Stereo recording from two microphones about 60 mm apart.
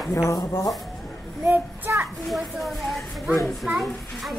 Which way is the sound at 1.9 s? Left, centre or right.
Right.